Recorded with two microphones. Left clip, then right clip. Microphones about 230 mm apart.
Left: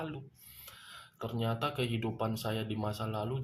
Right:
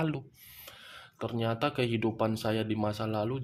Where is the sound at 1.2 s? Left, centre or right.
Right.